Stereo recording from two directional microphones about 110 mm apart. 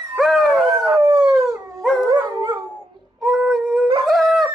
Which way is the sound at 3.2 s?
Centre (ahead or behind).